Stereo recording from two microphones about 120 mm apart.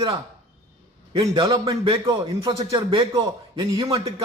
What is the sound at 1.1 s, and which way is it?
A man's voice, 45° right (ahead or behind).